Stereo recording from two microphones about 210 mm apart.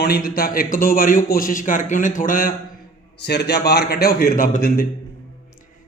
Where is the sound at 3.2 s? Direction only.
50° left (ahead or behind).